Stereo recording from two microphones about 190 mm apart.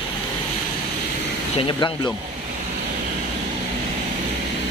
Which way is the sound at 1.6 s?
25° left (ahead or behind).